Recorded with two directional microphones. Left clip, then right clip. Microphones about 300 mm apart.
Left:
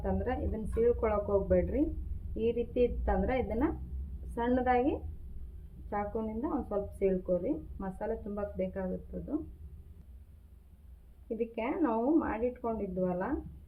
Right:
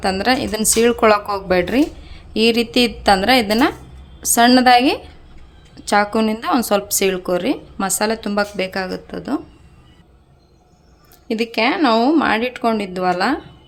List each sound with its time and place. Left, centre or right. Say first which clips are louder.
0.0 s a woman's voice: right 17 dB; right
11.3 s speech: right 16 dB; right